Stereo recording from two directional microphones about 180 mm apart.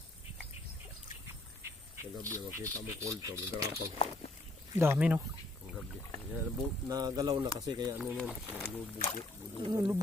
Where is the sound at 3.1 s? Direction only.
20° right (ahead or behind).